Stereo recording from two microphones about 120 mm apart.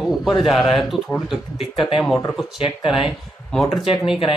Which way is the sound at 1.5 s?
50° left (ahead or behind).